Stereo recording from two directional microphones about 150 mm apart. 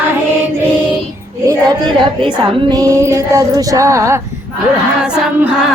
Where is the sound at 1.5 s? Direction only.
30° right (ahead or behind).